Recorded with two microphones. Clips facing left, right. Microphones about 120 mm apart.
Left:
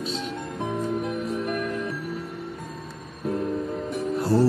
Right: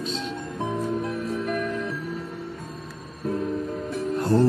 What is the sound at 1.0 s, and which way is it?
Music, 15° left (ahead or behind).